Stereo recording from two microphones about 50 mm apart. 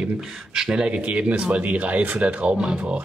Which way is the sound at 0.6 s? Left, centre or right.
Centre.